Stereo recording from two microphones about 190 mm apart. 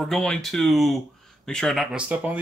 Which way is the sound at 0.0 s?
5° left (ahead or behind).